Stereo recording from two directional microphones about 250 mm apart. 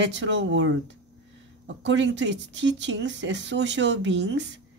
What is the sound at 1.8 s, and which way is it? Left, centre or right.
Speech, right.